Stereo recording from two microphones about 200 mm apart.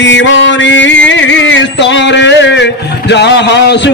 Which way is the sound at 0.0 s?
65° left (ahead or behind).